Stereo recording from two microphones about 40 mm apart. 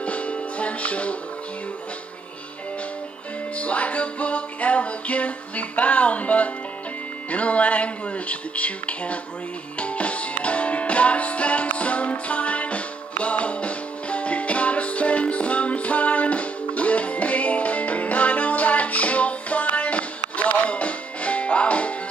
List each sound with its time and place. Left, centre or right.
0.0 s music: left
3.5 s music: left
7.2 s speech: left
9.8 s music: left